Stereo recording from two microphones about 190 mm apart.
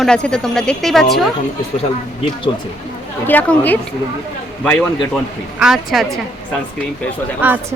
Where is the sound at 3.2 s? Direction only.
10° left (ahead or behind).